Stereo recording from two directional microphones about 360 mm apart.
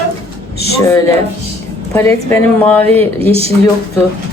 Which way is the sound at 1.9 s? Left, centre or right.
Centre.